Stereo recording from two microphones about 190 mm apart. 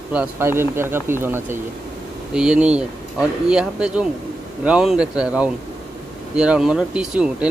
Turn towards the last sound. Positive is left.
turn(degrees=-5)  # may be behind; listen again after turning